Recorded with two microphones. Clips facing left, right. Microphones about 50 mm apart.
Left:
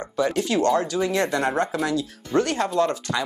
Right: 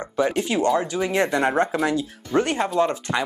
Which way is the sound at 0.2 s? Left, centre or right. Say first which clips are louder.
Even; right.